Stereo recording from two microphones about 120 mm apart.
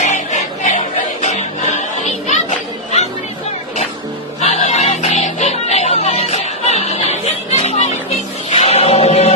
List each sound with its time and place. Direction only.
0.0 s music: 75° left (ahead or behind)
4.4 s music: 70° left (ahead or behind)
8.4 s chant: 55° left (ahead or behind)